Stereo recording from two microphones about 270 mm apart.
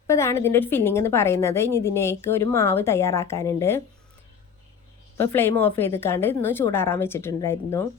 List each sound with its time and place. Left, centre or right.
0.1 s a woman's voice: centre
5.1 s a woman's voice: centre